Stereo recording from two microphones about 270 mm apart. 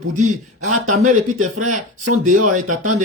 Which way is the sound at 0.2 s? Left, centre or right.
Right.